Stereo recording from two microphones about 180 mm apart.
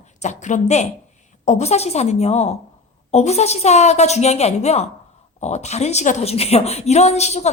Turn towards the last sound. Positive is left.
turn(degrees=40)  # may be behind; listen again after turning